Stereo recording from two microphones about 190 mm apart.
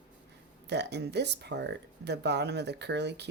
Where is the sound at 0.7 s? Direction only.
60° right (ahead or behind).